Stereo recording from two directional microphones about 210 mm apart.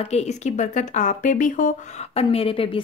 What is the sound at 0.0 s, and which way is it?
Speech, 30° left (ahead or behind).